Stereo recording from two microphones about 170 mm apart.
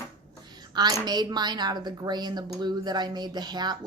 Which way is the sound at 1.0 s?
25° right (ahead or behind).